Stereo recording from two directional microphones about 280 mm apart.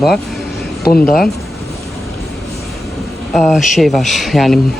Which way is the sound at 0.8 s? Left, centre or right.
Left.